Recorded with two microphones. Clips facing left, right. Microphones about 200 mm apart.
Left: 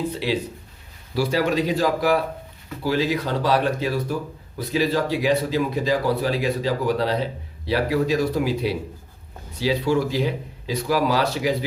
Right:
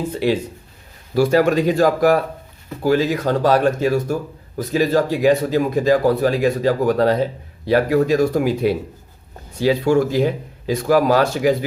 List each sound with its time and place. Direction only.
0.1 s speech: 50° right (ahead or behind)